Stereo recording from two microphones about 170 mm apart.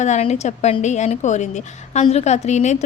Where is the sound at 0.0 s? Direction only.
40° left (ahead or behind).